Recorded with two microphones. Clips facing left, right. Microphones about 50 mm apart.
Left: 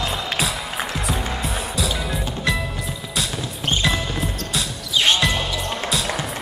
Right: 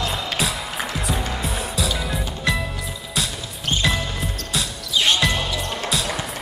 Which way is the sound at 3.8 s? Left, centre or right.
Centre.